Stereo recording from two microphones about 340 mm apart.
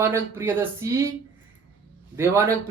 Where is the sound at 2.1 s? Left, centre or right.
Centre.